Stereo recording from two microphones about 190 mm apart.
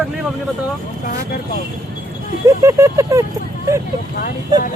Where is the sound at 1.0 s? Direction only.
50° left (ahead or behind).